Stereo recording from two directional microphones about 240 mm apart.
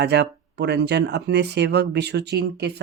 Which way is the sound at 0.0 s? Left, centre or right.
Right.